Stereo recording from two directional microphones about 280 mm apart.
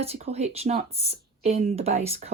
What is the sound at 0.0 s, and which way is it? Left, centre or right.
Speech, right.